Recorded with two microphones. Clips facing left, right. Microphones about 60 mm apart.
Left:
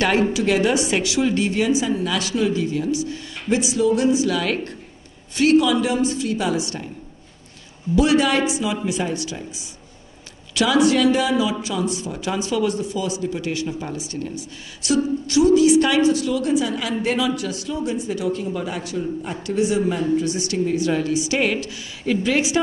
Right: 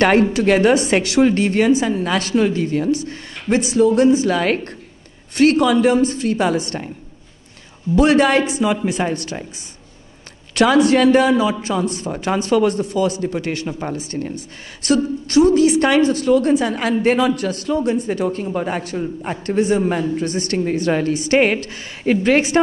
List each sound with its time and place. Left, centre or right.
0.3 s a woman's voice: right
7.9 s a woman's voice: right
10.5 s a woman's voice: right